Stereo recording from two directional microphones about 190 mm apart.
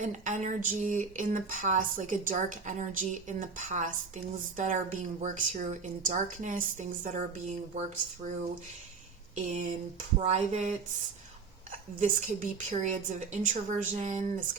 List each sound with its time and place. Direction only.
0.0 s speech: 40° right (ahead or behind)
11.9 s speech: 45° right (ahead or behind)